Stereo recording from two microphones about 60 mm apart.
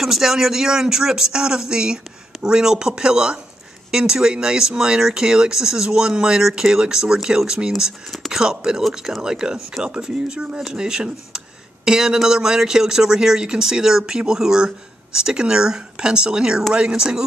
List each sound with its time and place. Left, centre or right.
0.0 s speech: centre